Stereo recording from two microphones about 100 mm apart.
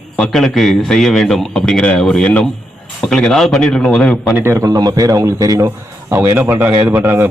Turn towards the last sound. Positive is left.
turn(degrees=-20)  # may be behind; listen again after turning